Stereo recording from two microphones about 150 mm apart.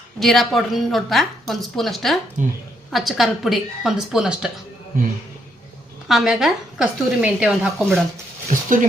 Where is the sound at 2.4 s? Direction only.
55° right (ahead or behind).